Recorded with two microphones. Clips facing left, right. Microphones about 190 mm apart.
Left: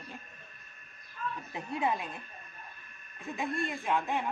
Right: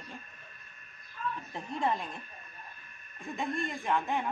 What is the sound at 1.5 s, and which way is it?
Speech, 10° left (ahead or behind).